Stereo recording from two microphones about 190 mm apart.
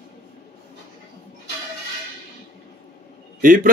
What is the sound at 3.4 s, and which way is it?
Speech, 45° right (ahead or behind).